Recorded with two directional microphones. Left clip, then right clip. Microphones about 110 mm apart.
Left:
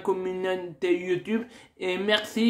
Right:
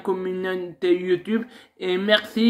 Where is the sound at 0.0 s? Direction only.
20° left (ahead or behind).